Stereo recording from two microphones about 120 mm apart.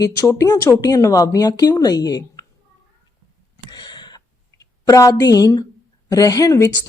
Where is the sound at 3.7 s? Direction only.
35° left (ahead or behind).